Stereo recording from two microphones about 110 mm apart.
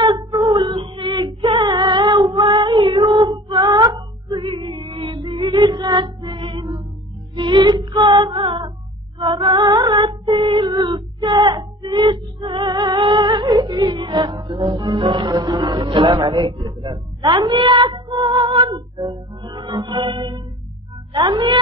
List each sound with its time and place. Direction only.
0.0 s female singing: 35° right (ahead or behind)
0.7 s female singing: 45° right (ahead or behind)
2.3 s child singing: 45° right (ahead or behind)
3.4 s wail: 35° right (ahead or behind)
4.4 s music: 50° right (ahead or behind)
9.6 s female singing: 40° right (ahead or behind)
10.4 s cat: 40° right (ahead or behind)
11.1 s music: 35° right (ahead or behind); by 16.6 s 55° right (ahead or behind)
16.6 s a sound: 35° right (ahead or behind)
17.5 s child singing: 55° right (ahead or behind)
18.9 s music: 40° right (ahead or behind)